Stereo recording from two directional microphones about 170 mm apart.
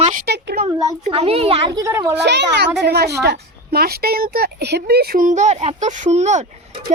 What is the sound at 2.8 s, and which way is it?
Speech, 75° right (ahead or behind).